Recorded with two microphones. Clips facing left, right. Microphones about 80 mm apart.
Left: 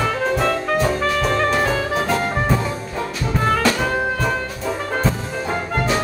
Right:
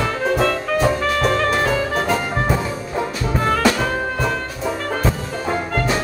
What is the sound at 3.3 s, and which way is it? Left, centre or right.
Music, centre.